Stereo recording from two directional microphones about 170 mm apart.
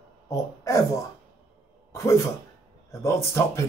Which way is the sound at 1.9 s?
15° left (ahead or behind).